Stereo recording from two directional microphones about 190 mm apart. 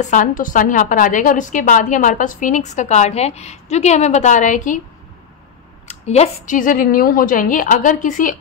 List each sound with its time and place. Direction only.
0.0 s a woman's voice: 40° left (ahead or behind)
6.0 s a woman's voice: 35° left (ahead or behind)